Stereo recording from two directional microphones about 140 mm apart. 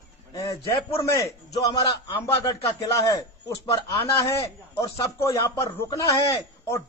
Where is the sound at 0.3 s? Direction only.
20° left (ahead or behind).